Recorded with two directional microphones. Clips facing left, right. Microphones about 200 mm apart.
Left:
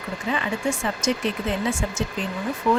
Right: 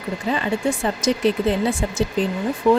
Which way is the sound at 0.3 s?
35° right (ahead or behind).